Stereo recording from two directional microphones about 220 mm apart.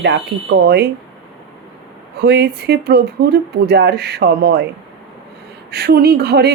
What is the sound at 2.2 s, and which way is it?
Speech, 50° right (ahead or behind).